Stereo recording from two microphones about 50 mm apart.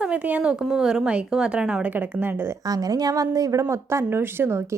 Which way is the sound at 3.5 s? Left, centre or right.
Right.